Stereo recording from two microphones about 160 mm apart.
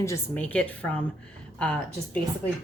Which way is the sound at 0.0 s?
15° left (ahead or behind).